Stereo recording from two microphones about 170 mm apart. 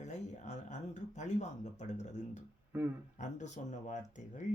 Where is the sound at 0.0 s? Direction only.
45° left (ahead or behind).